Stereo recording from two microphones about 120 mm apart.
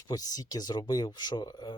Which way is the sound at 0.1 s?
30° left (ahead or behind).